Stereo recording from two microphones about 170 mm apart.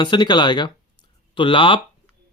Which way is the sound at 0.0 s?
25° left (ahead or behind).